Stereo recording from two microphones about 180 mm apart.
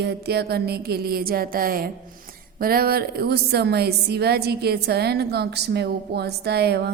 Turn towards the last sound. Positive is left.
turn(degrees=-65)  # may be behind; listen again after turning